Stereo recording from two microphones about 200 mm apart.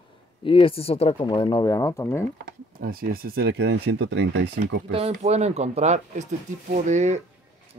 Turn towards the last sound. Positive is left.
turn(degrees=-35)  # may be behind; listen again after turning